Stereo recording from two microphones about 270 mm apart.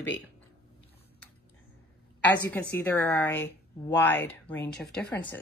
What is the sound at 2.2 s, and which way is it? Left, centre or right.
Speech, centre.